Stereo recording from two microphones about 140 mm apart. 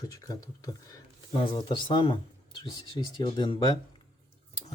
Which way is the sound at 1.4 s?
35° left (ahead or behind).